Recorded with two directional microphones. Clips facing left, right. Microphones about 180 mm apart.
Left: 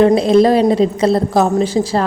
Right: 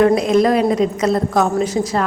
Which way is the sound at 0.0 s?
30° left (ahead or behind).